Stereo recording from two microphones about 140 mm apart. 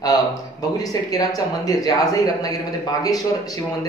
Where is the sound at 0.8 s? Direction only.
25° left (ahead or behind).